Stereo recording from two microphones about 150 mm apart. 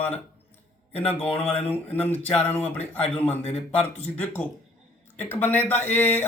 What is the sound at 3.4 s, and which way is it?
Speech, 40° left (ahead or behind).